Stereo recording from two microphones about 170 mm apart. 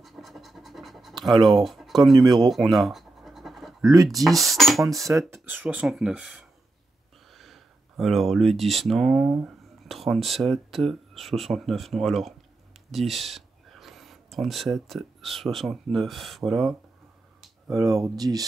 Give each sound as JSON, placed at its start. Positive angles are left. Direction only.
{"t": 0.0, "sound": "scratch", "side_deg": 0}
{"t": 1.3, "sound": "speech", "side_deg": -25}
{"t": 1.6, "sound": "speech", "side_deg": 0}
{"t": 2.3, "sound": "scratch", "side_deg": 0}
{"t": 4.1, "sound": "speech", "side_deg": 0}
{"t": 5.3, "sound": "speech", "side_deg": -10}
{"t": 17.6, "sound": "speech", "side_deg": -20}